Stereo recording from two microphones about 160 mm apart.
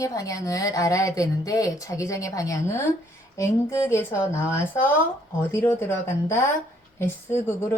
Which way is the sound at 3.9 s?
15° left (ahead or behind).